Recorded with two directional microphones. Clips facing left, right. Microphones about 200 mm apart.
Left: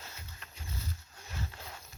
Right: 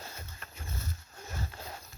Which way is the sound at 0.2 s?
50° right (ahead or behind).